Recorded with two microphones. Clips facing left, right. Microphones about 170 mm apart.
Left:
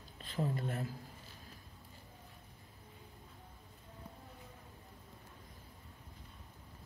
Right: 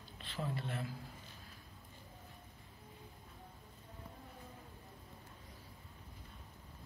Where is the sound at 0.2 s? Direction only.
40° left (ahead or behind).